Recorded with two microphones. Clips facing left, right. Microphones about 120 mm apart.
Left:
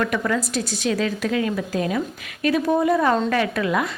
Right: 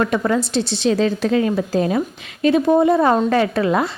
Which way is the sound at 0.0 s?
30° right (ahead or behind).